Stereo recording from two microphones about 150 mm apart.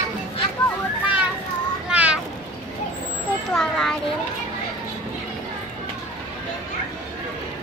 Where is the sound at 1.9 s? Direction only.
10° right (ahead or behind).